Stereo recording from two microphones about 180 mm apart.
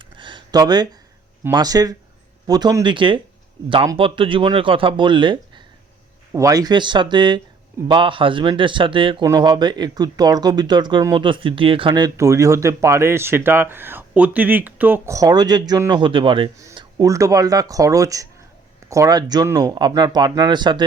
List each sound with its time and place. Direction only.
0.0 s a sound: 25° right (ahead or behind)
1.5 s speech: 20° right (ahead or behind)
16.6 s speech: 20° right (ahead or behind)